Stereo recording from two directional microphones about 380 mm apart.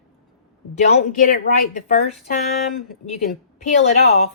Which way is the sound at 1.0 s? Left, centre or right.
Left.